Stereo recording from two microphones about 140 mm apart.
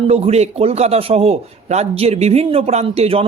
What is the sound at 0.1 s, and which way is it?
Speech, 50° right (ahead or behind).